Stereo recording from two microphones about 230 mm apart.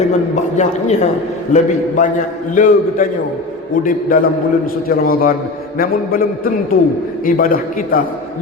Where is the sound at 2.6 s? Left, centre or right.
Left.